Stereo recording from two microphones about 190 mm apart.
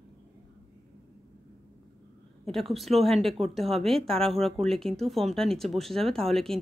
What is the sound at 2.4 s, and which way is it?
A woman's voice, centre (ahead or behind).